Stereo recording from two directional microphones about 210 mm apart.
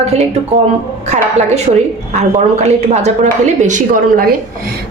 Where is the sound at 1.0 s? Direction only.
35° right (ahead or behind).